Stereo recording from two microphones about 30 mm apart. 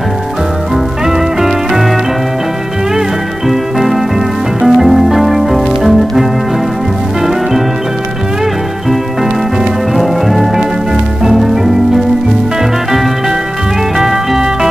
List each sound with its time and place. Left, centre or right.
1.0 s music: centre
3.4 s music: centre
9.9 s music: centre
13.9 s music: centre